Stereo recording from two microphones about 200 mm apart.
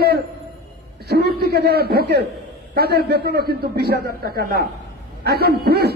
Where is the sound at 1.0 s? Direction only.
55° right (ahead or behind).